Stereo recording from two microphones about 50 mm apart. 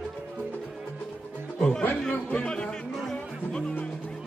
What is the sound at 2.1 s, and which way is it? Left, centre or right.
Speech, centre.